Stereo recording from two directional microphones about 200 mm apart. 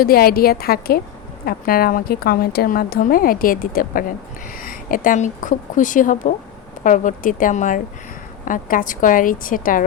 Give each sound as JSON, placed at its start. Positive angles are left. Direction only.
{"t": 0.0, "sound": "a woman's voice", "side_deg": 50}